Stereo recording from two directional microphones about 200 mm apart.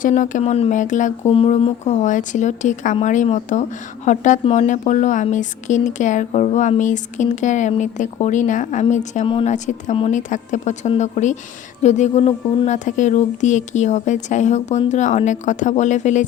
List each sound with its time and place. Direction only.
0.0 s a woman's voice: 40° left (ahead or behind)